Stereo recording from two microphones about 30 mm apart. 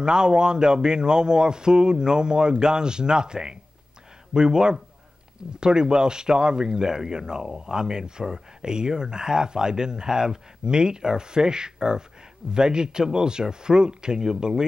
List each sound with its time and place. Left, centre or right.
0.0 s speech: right